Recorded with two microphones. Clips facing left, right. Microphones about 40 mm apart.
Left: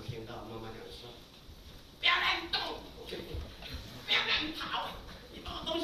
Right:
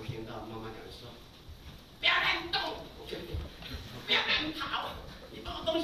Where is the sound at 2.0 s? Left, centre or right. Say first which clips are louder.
Right 1 dB; right.